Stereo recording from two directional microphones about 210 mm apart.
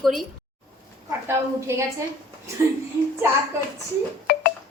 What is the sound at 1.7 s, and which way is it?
Speech, 10° right (ahead or behind).